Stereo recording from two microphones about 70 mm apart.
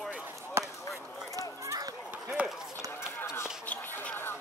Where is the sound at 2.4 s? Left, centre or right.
Centre.